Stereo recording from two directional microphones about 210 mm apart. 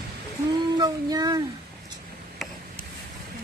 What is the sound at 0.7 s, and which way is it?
Child singing, 20° right (ahead or behind).